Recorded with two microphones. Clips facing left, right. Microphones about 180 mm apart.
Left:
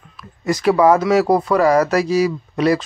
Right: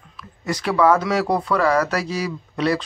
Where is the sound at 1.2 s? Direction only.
40° left (ahead or behind).